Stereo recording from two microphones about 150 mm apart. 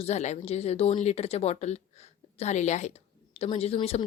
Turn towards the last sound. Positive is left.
turn(degrees=40)  # may be behind; listen again after turning